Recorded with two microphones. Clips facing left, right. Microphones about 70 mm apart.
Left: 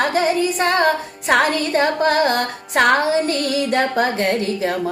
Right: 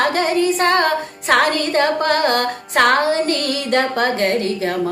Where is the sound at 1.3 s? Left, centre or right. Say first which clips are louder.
Right 1 dB; centre.